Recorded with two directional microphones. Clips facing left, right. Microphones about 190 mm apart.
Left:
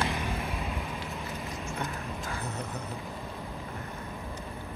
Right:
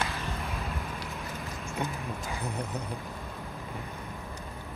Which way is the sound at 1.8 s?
15° right (ahead or behind).